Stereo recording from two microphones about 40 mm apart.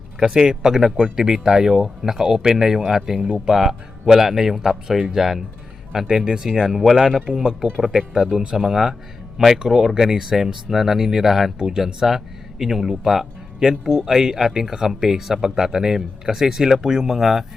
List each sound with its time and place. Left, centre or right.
0.2 s speech: centre
6.6 s speech: centre
7.3 s speech: centre
11.6 s speech: centre